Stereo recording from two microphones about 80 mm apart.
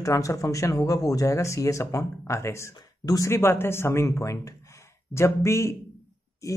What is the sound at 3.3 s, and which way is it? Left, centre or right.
Speech, left.